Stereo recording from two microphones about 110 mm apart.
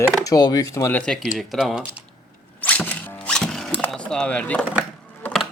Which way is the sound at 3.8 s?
10° left (ahead or behind).